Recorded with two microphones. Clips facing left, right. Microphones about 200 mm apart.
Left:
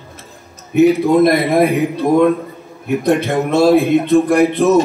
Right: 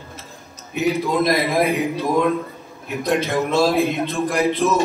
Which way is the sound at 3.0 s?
65° left (ahead or behind).